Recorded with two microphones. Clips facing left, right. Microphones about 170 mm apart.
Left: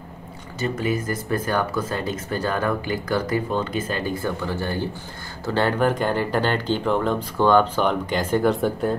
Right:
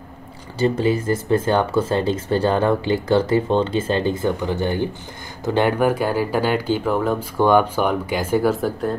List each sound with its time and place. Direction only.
0.6 s speech: 30° right (ahead or behind); by 8.9 s centre (ahead or behind)